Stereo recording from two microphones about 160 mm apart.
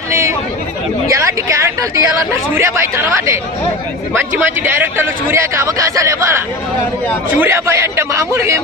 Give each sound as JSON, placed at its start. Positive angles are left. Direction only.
{"t": 1.0, "sound": "a woman's voice", "side_deg": -20}
{"t": 4.4, "sound": "speech", "side_deg": -15}